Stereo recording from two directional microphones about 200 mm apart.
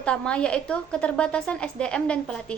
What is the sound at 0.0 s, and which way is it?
A woman's voice, 5° left (ahead or behind).